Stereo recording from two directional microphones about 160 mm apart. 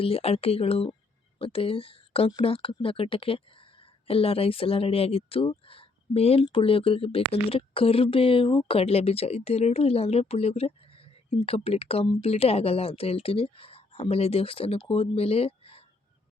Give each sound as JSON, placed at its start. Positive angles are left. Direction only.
{"t": 0.0, "sound": "speech", "side_deg": 40}